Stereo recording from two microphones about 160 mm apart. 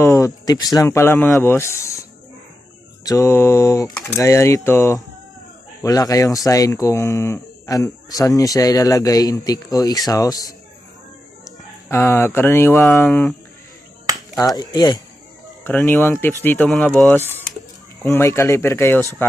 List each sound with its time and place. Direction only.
0.0 s speech: 20° left (ahead or behind)
3.1 s speech: 15° left (ahead or behind)
14.4 s speech: 25° left (ahead or behind)
15.6 s speech: 10° left (ahead or behind)